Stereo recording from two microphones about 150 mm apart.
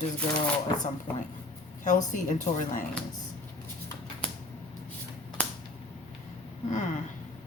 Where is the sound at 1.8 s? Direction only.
55° left (ahead or behind).